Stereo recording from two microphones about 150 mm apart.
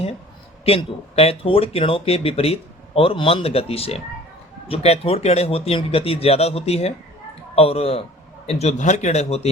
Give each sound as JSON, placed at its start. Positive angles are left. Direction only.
{"t": 0.6, "sound": "speech", "side_deg": 40}